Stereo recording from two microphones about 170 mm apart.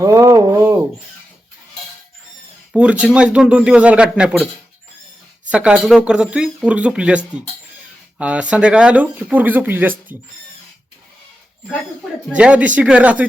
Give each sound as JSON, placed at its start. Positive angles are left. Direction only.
{"t": 0.0, "sound": "a sound", "side_deg": -15}
{"t": 2.7, "sound": "speech", "side_deg": -5}
{"t": 5.5, "sound": "speech", "side_deg": -5}
{"t": 8.2, "sound": "speech", "side_deg": -5}
{"t": 12.4, "sound": "speech", "side_deg": -5}